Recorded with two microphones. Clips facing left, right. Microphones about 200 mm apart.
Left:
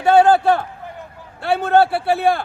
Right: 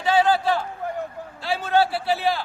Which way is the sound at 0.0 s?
55° left (ahead or behind).